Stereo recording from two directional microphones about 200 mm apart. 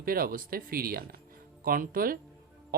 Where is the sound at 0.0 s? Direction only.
45° right (ahead or behind).